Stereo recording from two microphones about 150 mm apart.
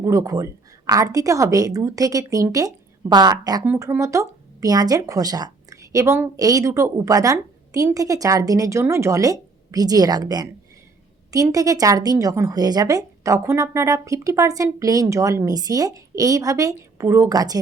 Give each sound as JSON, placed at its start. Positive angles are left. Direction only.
{"t": 0.0, "sound": "speech", "side_deg": -20}
{"t": 3.7, "sound": "speech", "side_deg": -15}